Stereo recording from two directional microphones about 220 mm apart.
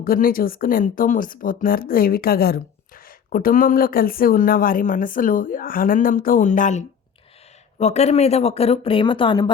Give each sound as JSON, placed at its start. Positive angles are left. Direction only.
{"t": 0.0, "sound": "speech", "side_deg": 40}